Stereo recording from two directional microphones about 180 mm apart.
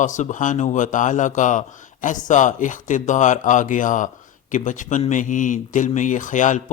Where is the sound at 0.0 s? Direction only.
45° left (ahead or behind).